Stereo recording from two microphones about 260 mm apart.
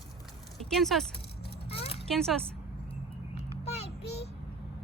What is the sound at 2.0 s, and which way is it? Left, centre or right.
Speech, centre.